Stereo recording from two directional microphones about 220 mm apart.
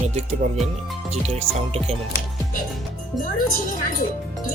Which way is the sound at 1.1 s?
30° right (ahead or behind).